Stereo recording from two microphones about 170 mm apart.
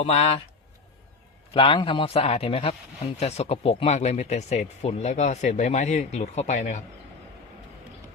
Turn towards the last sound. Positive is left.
turn(degrees=45)  # may be behind; listen again after turning